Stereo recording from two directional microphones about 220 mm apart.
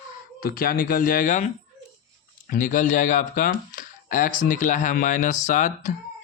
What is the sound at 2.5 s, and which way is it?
Speech, 35° left (ahead or behind).